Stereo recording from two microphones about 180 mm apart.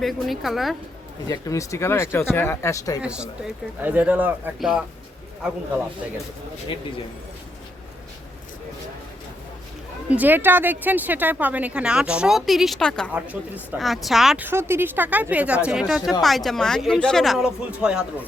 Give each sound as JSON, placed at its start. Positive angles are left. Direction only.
{"t": 0.0, "sound": "speech", "side_deg": 0}
{"t": 1.3, "sound": "speech", "side_deg": 20}
{"t": 3.0, "sound": "speech", "side_deg": -5}
{"t": 10.2, "sound": "speech", "side_deg": -10}